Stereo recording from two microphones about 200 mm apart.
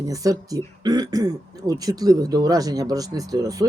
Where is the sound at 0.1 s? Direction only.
15° right (ahead or behind).